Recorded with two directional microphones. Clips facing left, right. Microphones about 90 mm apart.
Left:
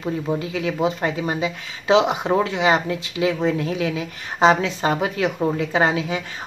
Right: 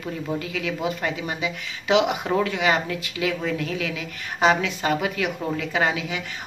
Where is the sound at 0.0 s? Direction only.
25° left (ahead or behind).